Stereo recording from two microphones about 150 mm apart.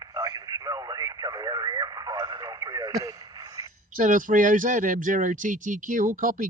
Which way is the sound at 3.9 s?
60° right (ahead or behind).